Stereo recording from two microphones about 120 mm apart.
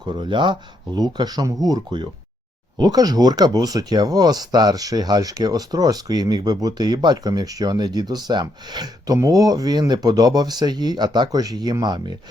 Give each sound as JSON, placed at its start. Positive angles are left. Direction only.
{"t": 0.0, "sound": "speech", "side_deg": -40}